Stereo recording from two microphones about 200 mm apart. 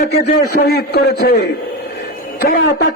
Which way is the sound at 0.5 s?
50° left (ahead or behind).